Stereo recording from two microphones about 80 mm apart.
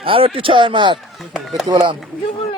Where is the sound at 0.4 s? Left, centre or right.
Right.